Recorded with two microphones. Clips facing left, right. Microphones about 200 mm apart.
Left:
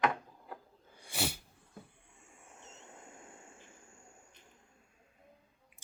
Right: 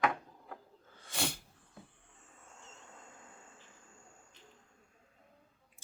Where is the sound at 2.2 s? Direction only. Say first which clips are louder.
Left 1 dB; 10° left (ahead or behind).